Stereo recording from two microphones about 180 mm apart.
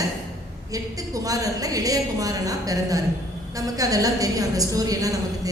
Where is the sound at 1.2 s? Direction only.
20° right (ahead or behind).